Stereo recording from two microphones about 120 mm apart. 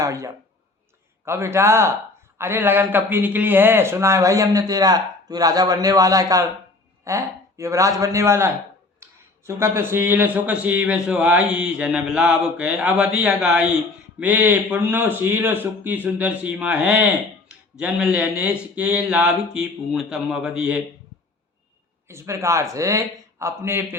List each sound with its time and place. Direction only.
0.0 s a man's voice: 25° right (ahead or behind)
9.6 s a man's voice: 20° right (ahead or behind)
22.1 s a man's voice: 20° right (ahead or behind)